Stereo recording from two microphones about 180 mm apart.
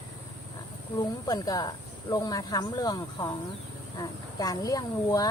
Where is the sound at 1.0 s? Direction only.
20° left (ahead or behind).